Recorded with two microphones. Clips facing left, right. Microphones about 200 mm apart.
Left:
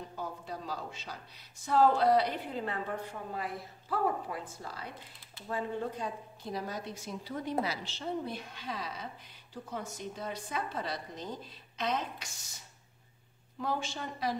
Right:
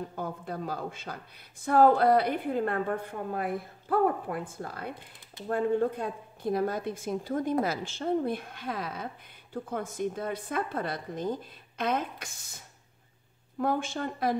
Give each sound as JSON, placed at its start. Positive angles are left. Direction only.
{"t": 0.1, "sound": "a woman's voice", "side_deg": -55}